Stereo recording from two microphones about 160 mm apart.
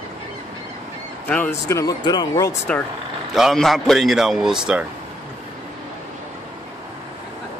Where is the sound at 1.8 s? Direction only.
25° left (ahead or behind).